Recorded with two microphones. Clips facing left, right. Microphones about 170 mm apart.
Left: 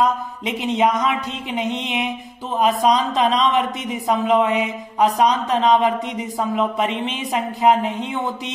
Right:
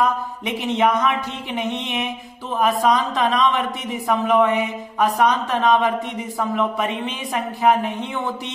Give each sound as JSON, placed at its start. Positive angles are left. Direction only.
{"t": 0.7, "sound": "a man's voice", "side_deg": 15}